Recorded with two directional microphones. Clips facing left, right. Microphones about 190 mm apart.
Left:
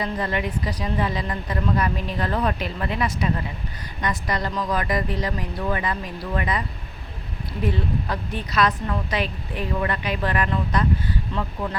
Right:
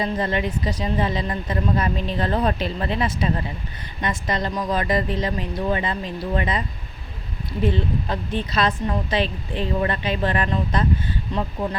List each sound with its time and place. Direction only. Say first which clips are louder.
0.0 s a woman's voice: right 2 dB; 25° right (ahead or behind)